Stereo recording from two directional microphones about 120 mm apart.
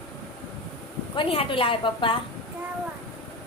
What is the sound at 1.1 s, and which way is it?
A woman's voice, 50° left (ahead or behind).